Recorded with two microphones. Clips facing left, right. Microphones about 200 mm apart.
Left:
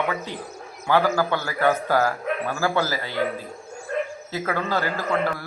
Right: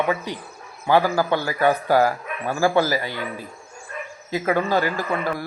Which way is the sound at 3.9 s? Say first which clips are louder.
Left 9 dB; 70° left (ahead or behind).